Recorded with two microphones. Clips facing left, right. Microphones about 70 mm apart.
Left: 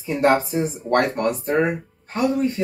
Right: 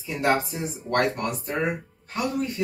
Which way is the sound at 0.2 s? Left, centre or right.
Left.